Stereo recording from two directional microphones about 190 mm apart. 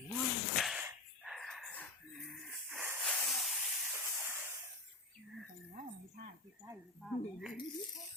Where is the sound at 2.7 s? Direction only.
5° right (ahead or behind).